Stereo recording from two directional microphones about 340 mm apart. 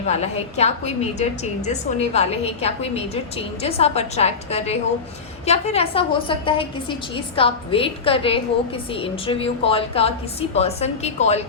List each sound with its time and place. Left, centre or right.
0.0 s a woman's voice: centre